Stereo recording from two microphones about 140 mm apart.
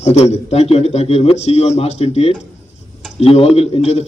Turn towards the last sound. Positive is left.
turn(degrees=50)  # may be behind; listen again after turning